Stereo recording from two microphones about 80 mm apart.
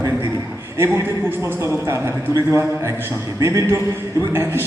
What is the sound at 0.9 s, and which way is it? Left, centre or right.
A man's voice, right.